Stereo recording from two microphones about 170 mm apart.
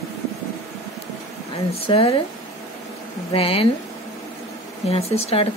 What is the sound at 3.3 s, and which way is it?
Speech, 35° left (ahead or behind).